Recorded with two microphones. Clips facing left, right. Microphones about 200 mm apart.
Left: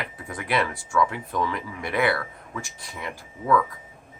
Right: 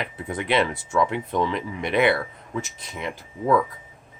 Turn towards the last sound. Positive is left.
turn(degrees=-25)  # may be behind; listen again after turning